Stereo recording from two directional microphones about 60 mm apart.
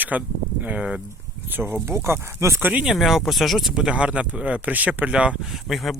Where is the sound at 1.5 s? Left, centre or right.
Right.